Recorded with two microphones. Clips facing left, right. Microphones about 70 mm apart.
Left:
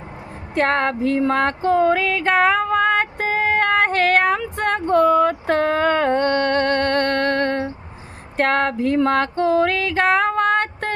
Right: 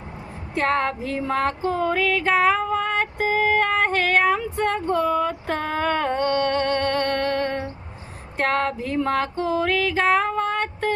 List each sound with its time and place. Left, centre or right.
0.5 s female singing: left
8.4 s music: left